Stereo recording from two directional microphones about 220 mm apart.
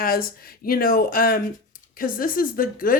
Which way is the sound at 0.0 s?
40° left (ahead or behind).